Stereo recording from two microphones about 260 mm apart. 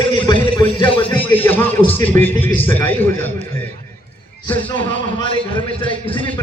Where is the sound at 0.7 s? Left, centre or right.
Centre.